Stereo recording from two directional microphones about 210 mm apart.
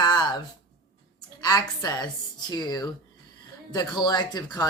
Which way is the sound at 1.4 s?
20° left (ahead or behind).